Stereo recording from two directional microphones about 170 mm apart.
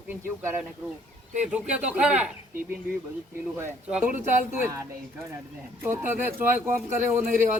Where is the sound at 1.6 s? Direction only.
40° right (ahead or behind).